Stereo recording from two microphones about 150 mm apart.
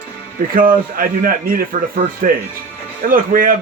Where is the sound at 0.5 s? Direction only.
70° right (ahead or behind).